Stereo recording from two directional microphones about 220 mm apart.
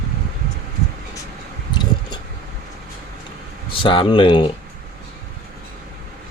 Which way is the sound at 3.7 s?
25° left (ahead or behind).